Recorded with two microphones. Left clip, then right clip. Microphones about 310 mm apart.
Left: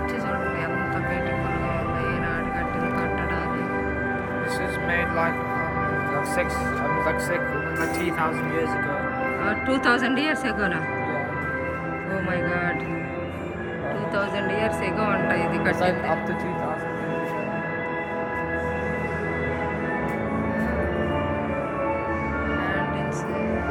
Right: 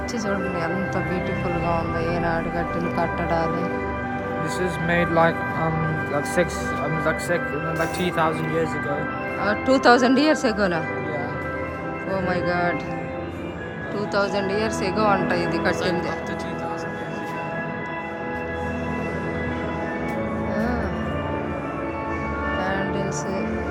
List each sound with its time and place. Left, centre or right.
4.9 s speech: right
7.0 s speech: right
9.5 s speech: centre
12.3 s speech: centre
14.2 s speech: centre
15.8 s speech: centre